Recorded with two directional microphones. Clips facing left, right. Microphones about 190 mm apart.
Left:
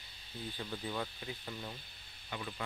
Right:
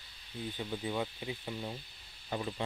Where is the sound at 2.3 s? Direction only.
30° right (ahead or behind).